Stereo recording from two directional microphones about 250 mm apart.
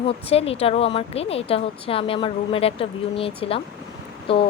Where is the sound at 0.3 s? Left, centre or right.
Left.